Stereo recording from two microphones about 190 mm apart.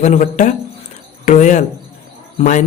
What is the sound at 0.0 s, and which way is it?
A man's voice, 40° left (ahead or behind).